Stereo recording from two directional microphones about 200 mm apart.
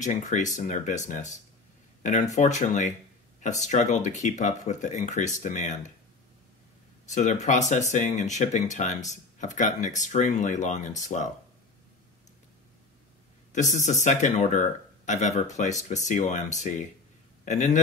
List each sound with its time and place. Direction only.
0.0 s speech: 35° left (ahead or behind)
2.3 s speech: 35° left (ahead or behind)
7.1 s speech: 35° left (ahead or behind)
13.5 s speech: 35° left (ahead or behind)